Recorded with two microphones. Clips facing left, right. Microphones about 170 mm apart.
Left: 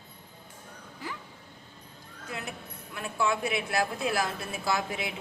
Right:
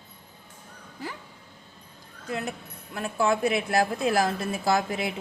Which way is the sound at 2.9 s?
40° right (ahead or behind).